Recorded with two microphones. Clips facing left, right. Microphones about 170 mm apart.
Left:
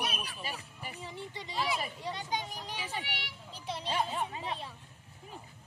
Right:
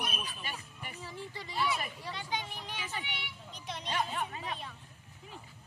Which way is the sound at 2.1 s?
40° left (ahead or behind).